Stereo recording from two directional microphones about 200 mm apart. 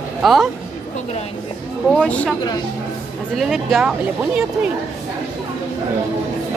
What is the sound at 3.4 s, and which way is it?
Speech, centre (ahead or behind).